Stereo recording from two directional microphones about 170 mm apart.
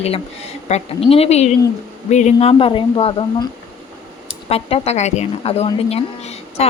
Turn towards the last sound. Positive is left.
turn(degrees=40)  # may be behind; listen again after turning